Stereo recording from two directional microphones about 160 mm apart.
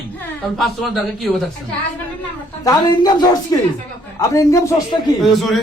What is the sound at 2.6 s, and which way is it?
Speech, 25° left (ahead or behind).